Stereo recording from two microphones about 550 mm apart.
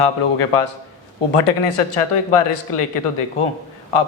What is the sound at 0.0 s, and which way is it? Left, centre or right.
Speech, left.